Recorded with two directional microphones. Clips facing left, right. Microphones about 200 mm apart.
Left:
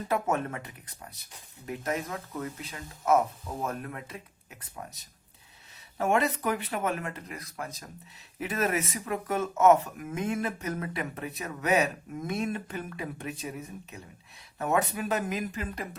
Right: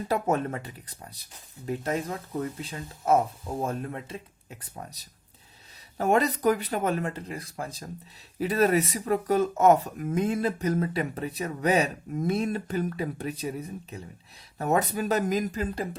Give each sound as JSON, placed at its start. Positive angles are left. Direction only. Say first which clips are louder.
{"t": 0.1, "sound": "speech", "louder": "right 3 dB", "side_deg": -35}